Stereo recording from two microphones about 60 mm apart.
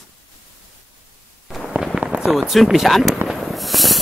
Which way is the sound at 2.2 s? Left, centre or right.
Centre.